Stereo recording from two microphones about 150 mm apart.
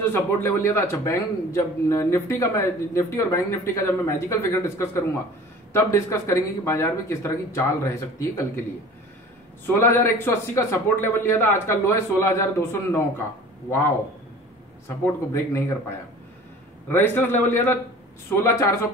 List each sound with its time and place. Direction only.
0.1 s a man's voice: 15° left (ahead or behind)
9.8 s a man's voice: 15° left (ahead or behind)
15.0 s a man's voice: 20° left (ahead or behind)
16.9 s a man's voice: 15° left (ahead or behind)